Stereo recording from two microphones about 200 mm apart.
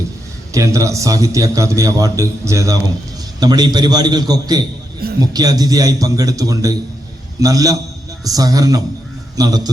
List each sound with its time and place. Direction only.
0.5 s a man's voice: 15° right (ahead or behind)